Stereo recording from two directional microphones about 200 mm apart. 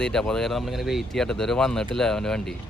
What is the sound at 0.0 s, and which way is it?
Speech, 5° left (ahead or behind).